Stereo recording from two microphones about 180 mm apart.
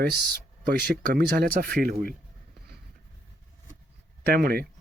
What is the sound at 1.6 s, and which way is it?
Speech, 55° right (ahead or behind).